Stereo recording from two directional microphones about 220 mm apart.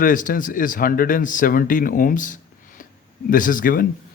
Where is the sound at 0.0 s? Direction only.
35° left (ahead or behind).